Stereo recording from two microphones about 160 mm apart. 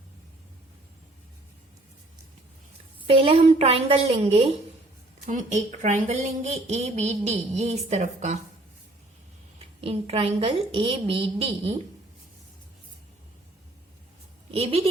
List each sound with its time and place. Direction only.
3.1 s a woman's voice: 35° right (ahead or behind)
5.2 s speech: 50° right (ahead or behind)
9.8 s a woman's voice: 35° right (ahead or behind)
14.5 s a woman's voice: 40° right (ahead or behind)